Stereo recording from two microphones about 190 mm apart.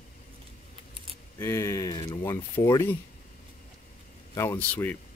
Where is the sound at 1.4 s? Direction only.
15° left (ahead or behind).